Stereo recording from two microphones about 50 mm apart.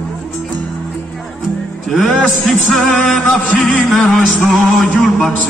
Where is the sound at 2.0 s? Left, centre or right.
Centre.